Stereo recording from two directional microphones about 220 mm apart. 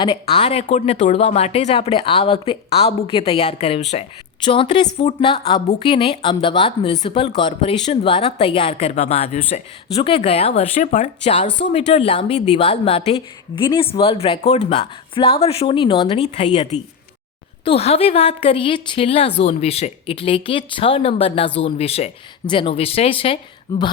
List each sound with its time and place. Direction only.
0.0 s speech: 20° left (ahead or behind)